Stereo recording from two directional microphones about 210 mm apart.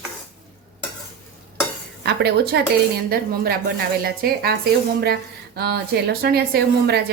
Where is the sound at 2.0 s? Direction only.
50° right (ahead or behind).